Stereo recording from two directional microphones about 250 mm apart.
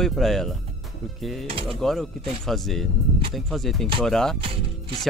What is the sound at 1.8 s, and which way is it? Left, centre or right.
Speech, centre.